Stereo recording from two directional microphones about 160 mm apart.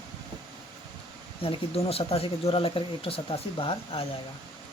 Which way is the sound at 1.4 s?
35° left (ahead or behind).